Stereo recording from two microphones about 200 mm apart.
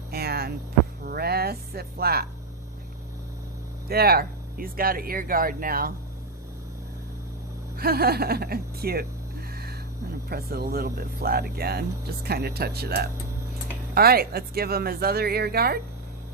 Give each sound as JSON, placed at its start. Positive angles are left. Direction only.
{"t": 0.1, "sound": "a sound", "side_deg": -50}
{"t": 1.0, "sound": "speech", "side_deg": -50}
{"t": 3.8, "sound": "speech", "side_deg": -50}
{"t": 7.8, "sound": "speech", "side_deg": -50}
{"t": 10.2, "sound": "speech", "side_deg": -50}